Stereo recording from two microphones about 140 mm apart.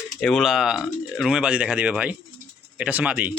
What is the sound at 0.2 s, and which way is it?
A man's voice, 5° left (ahead or behind).